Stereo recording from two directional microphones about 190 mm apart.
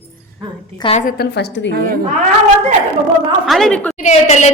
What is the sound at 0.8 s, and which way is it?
Speech, 30° left (ahead or behind).